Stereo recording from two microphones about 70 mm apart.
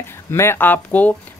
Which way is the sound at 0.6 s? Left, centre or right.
Left.